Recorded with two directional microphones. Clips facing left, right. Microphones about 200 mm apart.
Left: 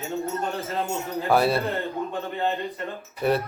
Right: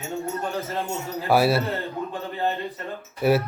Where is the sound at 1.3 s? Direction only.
5° right (ahead or behind).